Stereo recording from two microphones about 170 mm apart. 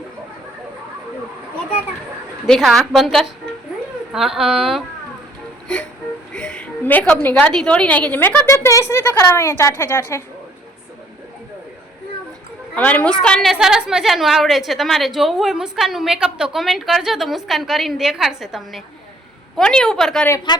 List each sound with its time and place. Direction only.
2.5 s a woman's voice: centre (ahead or behind)
5.6 s music: 5° left (ahead or behind)
6.3 s a woman's voice: 5° left (ahead or behind)
12.7 s a woman's voice: 10° left (ahead or behind)
20.5 s speech: 25° left (ahead or behind)